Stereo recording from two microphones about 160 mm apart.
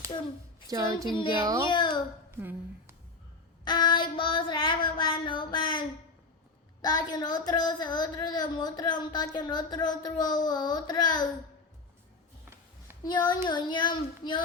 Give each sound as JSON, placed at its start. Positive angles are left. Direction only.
{"t": 0.7, "sound": "speech", "side_deg": -20}
{"t": 1.0, "sound": "a child's voice", "side_deg": 30}
{"t": 2.3, "sound": "speech", "side_deg": -15}
{"t": 3.6, "sound": "speech", "side_deg": 30}
{"t": 6.8, "sound": "speech", "side_deg": 25}
{"t": 13.1, "sound": "speech", "side_deg": 25}